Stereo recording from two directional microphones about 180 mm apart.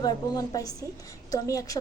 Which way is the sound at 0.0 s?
20° left (ahead or behind).